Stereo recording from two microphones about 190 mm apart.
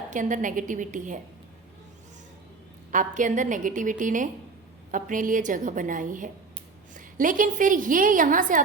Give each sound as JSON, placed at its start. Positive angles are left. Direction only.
{"t": 0.1, "sound": "a woman's voice", "side_deg": -40}
{"t": 2.9, "sound": "a woman's voice", "side_deg": -40}